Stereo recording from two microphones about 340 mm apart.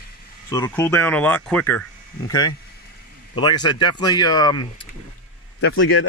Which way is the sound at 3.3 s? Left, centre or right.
Centre.